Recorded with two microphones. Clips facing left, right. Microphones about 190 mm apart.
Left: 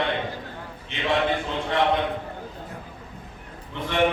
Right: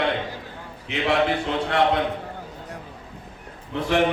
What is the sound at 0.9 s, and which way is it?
Mantra, 70° right (ahead or behind).